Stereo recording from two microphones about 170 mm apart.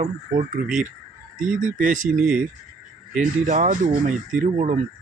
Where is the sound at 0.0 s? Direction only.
45° right (ahead or behind).